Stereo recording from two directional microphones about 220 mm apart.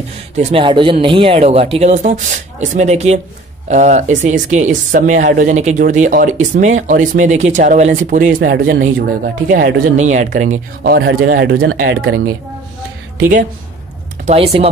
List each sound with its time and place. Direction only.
0.4 s speech: 25° right (ahead or behind); by 12.2 s 50° right (ahead or behind)
14.2 s speech: 25° right (ahead or behind)